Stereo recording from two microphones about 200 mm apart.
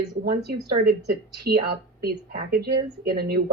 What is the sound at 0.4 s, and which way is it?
A woman's voice, 50° right (ahead or behind).